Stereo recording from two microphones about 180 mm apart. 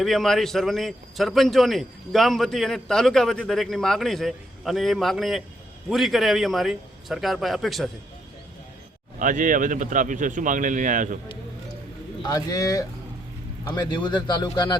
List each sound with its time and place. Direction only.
0.0 s a man's voice: centre (ahead or behind)
9.1 s speech: 45° right (ahead or behind)
12.2 s speech: 20° left (ahead or behind)